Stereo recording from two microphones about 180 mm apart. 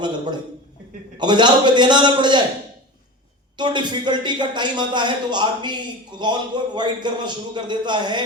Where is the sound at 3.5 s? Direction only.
25° right (ahead or behind).